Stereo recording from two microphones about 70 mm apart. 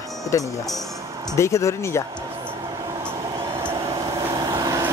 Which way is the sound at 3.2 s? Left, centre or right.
Right.